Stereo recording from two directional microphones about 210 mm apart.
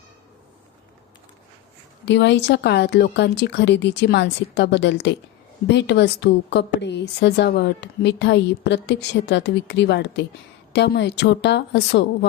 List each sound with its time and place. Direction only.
2.0 s speech: 55° left (ahead or behind)